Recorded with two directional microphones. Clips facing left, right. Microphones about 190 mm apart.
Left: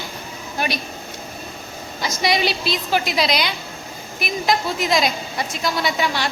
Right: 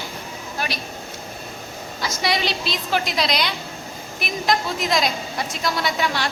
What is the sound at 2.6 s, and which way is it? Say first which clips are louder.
A woman's voice: left 2 dB; 5° left (ahead or behind).